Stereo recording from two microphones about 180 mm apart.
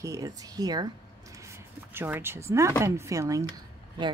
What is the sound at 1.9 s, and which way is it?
A woman's voice, 10° right (ahead or behind).